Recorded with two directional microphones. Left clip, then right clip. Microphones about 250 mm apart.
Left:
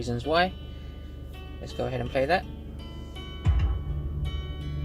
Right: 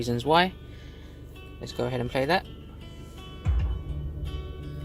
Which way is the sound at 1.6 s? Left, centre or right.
Right.